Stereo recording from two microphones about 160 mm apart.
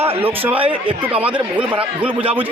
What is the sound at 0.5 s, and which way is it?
Speech, 35° right (ahead or behind).